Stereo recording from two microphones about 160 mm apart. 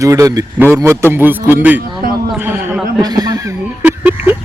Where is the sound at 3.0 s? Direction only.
25° right (ahead or behind).